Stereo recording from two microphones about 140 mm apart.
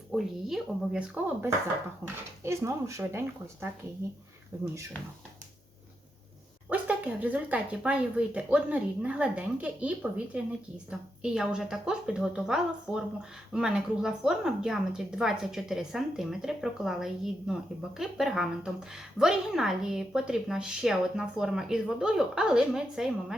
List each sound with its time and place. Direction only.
0.1 s a woman's voice: centre (ahead or behind); by 4.9 s 20° right (ahead or behind)
6.7 s a woman's voice: 10° right (ahead or behind)